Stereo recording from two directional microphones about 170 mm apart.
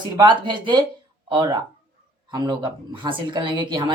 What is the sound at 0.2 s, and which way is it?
A woman's voice, 25° right (ahead or behind).